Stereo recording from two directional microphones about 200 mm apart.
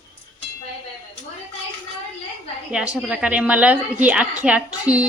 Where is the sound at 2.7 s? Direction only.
5° right (ahead or behind).